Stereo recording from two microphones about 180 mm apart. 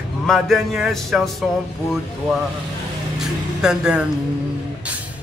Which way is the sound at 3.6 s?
5° right (ahead or behind).